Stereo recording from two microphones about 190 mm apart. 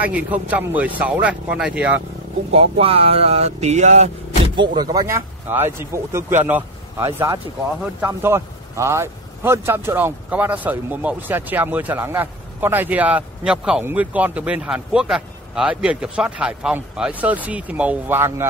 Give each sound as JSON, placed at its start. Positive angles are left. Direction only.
{"t": 0.0, "sound": "speech", "side_deg": -10}
{"t": 2.5, "sound": "speech", "side_deg": -30}
{"t": 4.6, "sound": "speech", "side_deg": -20}